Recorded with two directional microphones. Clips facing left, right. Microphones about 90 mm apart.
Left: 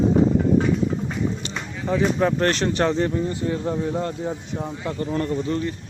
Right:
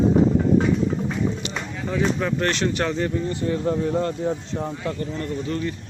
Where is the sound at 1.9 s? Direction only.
35° left (ahead or behind).